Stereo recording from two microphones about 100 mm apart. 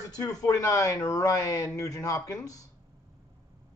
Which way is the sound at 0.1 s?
40° left (ahead or behind).